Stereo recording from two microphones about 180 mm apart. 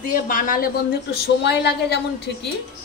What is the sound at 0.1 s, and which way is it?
Speech, 45° left (ahead or behind).